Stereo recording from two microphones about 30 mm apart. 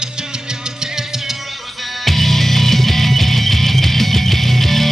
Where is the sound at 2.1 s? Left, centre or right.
Centre.